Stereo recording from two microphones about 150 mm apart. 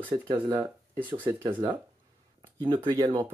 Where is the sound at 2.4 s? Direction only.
30° right (ahead or behind).